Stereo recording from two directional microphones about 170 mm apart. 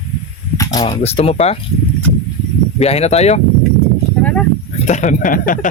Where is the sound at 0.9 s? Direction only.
35° left (ahead or behind).